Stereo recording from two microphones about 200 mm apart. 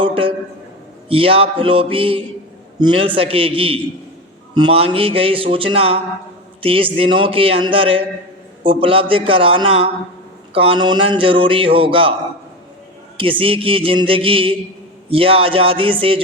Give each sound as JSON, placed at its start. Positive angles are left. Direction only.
{"t": 0.0, "sound": "a sound", "side_deg": -25}
{"t": 1.0, "sound": "a man's voice", "side_deg": -30}
{"t": 13.1, "sound": "a man's voice", "side_deg": -25}